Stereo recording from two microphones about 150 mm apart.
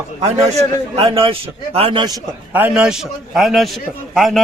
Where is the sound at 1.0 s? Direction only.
35° right (ahead or behind).